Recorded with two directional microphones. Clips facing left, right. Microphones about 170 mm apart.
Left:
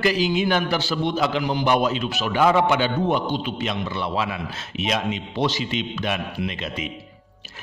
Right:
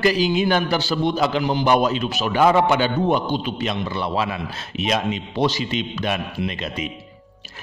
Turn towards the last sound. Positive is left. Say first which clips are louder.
# right 2 dB
turn(degrees=-40)  # may be behind; listen again after turning